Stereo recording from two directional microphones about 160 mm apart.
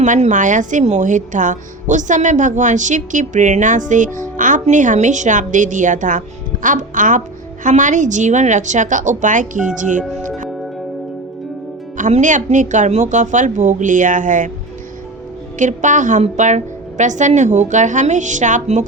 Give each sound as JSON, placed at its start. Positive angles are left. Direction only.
{"t": 0.0, "sound": "a woman's voice", "side_deg": -50}
{"t": 10.0, "sound": "speech", "side_deg": 0}
{"t": 10.2, "sound": "music", "side_deg": -50}
{"t": 11.9, "sound": "a woman's voice", "side_deg": -50}
{"t": 15.5, "sound": "a woman's voice", "side_deg": -50}